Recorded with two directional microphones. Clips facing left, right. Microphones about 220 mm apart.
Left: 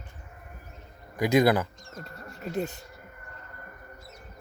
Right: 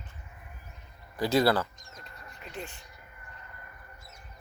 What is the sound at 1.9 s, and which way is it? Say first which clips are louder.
Music: left 8 dB; 45° left (ahead or behind).